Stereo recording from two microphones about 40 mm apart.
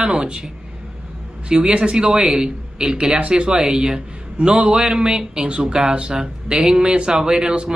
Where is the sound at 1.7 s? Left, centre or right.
Right.